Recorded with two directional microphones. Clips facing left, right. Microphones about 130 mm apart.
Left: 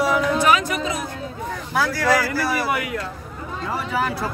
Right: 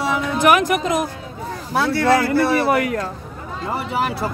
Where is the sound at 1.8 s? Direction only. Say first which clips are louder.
Right 3 dB; 25° right (ahead or behind).